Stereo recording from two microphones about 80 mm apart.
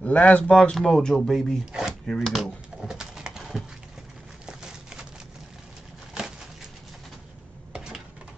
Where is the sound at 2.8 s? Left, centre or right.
Centre.